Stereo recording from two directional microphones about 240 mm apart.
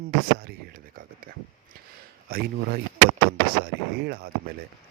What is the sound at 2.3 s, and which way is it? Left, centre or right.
Speech, right.